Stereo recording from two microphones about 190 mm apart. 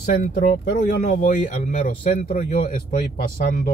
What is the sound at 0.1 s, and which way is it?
Speech, 50° left (ahead or behind).